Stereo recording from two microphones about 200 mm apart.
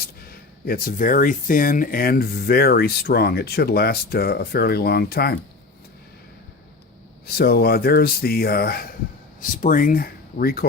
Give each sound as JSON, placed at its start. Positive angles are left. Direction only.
{"t": 0.0, "sound": "speech", "side_deg": 50}
{"t": 7.3, "sound": "speech", "side_deg": 50}